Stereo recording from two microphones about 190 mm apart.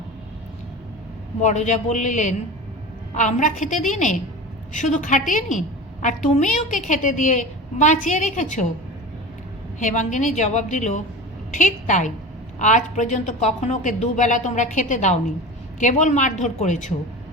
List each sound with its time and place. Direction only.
1.4 s a woman's voice: 40° left (ahead or behind)
9.7 s a woman's voice: 40° left (ahead or behind)